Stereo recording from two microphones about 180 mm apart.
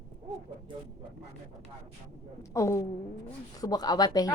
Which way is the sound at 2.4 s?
15° left (ahead or behind).